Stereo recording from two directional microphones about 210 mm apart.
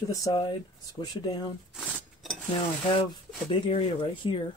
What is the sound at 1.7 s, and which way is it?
Dishes, centre (ahead or behind).